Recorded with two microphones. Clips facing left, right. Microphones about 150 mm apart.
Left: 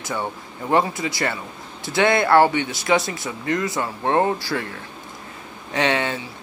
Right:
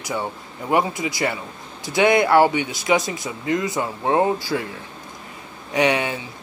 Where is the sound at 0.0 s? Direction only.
15° right (ahead or behind).